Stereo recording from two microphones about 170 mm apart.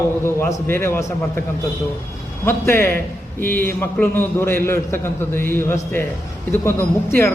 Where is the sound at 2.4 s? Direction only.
15° left (ahead or behind).